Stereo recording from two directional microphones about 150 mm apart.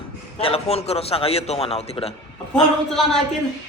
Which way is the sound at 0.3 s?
40° left (ahead or behind).